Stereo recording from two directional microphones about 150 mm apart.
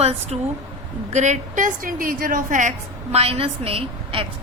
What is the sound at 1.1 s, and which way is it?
A woman's voice, 50° right (ahead or behind).